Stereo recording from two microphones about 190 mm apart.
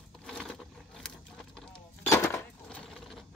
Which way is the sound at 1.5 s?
15° left (ahead or behind).